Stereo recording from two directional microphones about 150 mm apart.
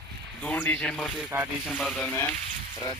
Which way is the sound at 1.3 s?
10° right (ahead or behind).